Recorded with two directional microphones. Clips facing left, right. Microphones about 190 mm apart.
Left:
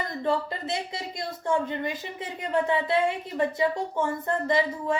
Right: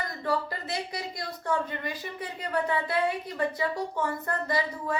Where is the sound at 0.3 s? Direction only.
25° left (ahead or behind).